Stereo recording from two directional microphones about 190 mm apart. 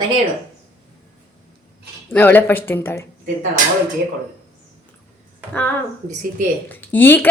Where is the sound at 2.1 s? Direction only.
10° left (ahead or behind).